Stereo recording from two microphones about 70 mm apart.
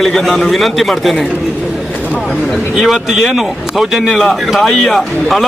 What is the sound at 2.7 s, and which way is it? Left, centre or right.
Speech, centre.